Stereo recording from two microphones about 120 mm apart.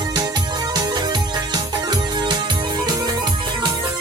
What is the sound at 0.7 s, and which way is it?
Music, 35° right (ahead or behind).